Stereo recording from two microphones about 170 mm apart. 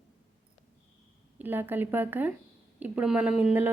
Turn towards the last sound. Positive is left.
turn(degrees=-10)  # may be behind; listen again after turning